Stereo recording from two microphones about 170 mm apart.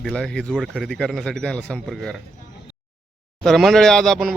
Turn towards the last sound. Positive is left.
turn(degrees=0)  # may be behind; listen again after turning